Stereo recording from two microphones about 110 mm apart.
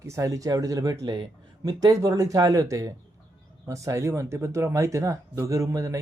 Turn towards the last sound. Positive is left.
turn(degrees=-30)  # may be behind; listen again after turning